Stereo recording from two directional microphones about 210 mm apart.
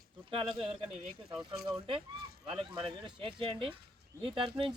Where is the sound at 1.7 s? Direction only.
25° right (ahead or behind).